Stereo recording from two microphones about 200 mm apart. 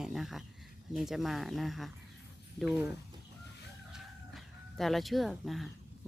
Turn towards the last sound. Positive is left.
turn(degrees=0)  # may be behind; listen again after turning